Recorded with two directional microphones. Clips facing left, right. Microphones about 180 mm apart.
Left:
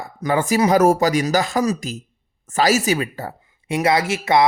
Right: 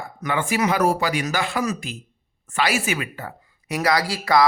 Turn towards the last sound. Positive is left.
turn(degrees=25)  # may be behind; listen again after turning